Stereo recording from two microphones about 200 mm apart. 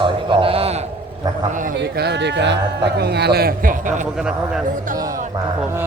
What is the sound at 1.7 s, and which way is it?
Speech, 55° right (ahead or behind).